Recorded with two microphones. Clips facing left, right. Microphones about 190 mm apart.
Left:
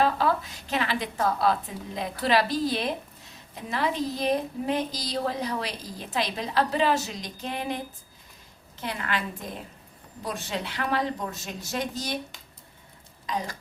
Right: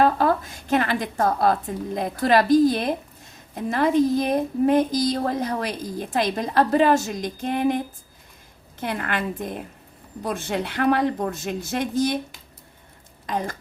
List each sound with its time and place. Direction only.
0.0 s a woman's voice: 50° right (ahead or behind)
8.8 s a woman's voice: 55° right (ahead or behind)
13.2 s speech: 50° right (ahead or behind)